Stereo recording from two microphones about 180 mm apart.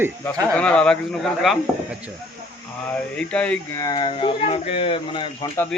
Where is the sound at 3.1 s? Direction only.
5° left (ahead or behind).